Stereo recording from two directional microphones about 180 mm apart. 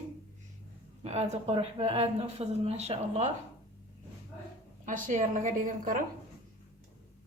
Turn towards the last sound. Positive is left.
turn(degrees=-45)  # may be behind; listen again after turning